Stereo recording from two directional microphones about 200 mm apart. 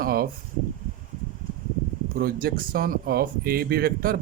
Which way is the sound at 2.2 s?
50° right (ahead or behind).